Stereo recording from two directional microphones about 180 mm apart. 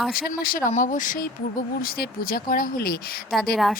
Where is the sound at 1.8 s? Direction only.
55° left (ahead or behind).